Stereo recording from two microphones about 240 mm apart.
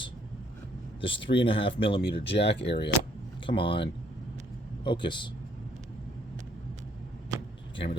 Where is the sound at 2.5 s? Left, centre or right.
Left.